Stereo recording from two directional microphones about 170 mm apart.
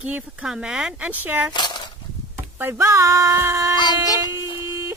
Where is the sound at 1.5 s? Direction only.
25° left (ahead or behind).